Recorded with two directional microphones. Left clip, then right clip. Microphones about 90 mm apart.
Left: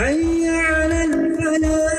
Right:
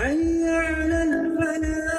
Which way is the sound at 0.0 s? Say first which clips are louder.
Left 4 dB; 35° right (ahead or behind).